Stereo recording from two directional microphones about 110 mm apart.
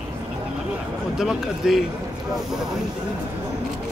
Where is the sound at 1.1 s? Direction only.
5° right (ahead or behind).